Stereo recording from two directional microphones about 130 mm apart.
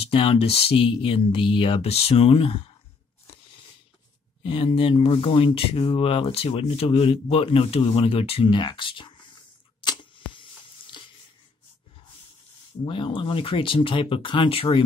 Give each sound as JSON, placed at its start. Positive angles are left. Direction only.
{"t": 0.0, "sound": "speech", "side_deg": 45}
{"t": 4.4, "sound": "speech", "side_deg": 40}
{"t": 9.8, "sound": "camera", "side_deg": 40}
{"t": 10.9, "sound": "a sound", "side_deg": 40}
{"t": 12.8, "sound": "speech", "side_deg": 40}